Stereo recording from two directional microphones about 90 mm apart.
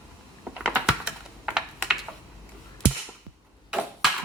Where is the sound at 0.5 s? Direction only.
10° right (ahead or behind).